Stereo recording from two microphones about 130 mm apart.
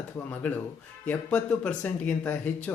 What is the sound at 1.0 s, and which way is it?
Speech, 10° left (ahead or behind).